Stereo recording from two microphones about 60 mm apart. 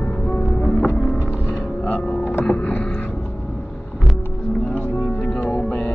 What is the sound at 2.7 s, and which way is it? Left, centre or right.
Music, left.